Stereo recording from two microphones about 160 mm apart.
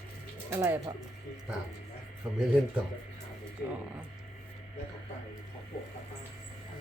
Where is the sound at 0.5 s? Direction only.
15° right (ahead or behind).